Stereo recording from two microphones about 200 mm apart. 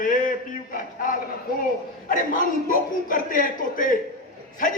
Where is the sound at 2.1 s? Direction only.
45° left (ahead or behind).